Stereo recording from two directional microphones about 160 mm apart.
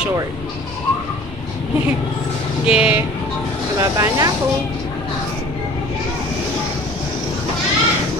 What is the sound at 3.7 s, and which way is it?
Speech, 20° right (ahead or behind).